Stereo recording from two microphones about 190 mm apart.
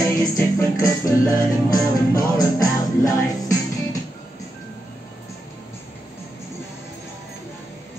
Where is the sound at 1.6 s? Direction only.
20° left (ahead or behind).